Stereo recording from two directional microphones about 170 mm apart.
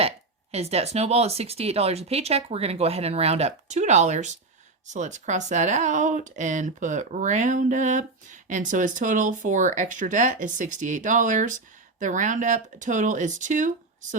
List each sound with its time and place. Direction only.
0.5 s speech: 40° right (ahead or behind)